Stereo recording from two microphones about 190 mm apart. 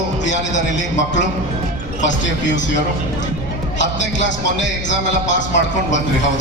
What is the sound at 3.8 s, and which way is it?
Music, 70° left (ahead or behind).